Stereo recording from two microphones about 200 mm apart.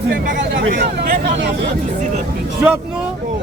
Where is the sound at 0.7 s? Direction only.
40° right (ahead or behind).